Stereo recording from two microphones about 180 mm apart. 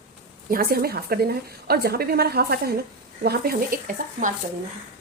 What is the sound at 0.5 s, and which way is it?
A woman's voice, 55° right (ahead or behind).